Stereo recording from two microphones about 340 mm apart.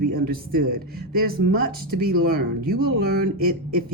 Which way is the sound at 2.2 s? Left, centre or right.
Right.